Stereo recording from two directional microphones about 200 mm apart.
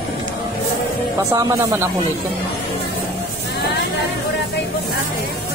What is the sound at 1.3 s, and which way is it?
Speech, 15° right (ahead or behind).